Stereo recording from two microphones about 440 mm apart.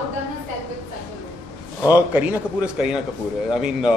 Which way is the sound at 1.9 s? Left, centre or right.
Centre.